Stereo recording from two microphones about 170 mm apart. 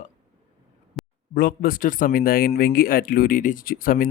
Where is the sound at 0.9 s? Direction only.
Centre (ahead or behind).